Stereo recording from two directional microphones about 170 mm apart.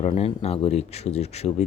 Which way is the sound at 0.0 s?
40° left (ahead or behind).